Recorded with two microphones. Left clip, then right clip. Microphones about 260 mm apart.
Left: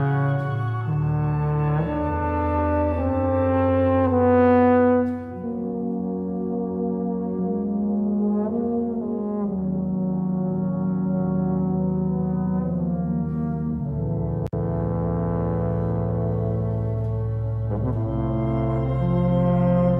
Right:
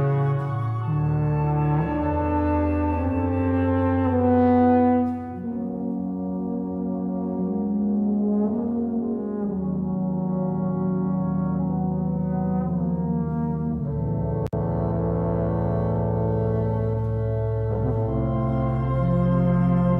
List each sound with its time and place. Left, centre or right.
3.5 s french horn: left
19.0 s music: centre